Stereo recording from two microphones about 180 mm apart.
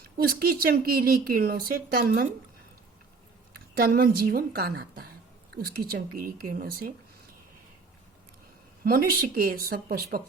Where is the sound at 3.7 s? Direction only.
55° right (ahead or behind).